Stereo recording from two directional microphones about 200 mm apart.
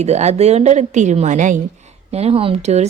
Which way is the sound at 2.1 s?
30° right (ahead or behind).